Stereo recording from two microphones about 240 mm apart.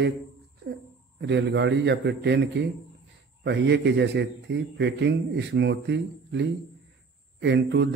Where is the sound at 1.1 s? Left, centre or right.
Right.